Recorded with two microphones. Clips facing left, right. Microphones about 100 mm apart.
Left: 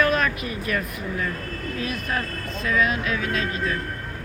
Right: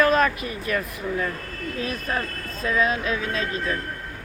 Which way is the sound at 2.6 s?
30° right (ahead or behind).